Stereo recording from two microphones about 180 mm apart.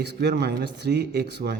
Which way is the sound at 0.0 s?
70° right (ahead or behind).